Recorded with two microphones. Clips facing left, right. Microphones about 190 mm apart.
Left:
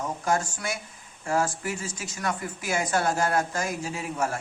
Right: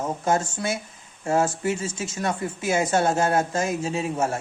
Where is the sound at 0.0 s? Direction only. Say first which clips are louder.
Right 3 dB; 25° right (ahead or behind).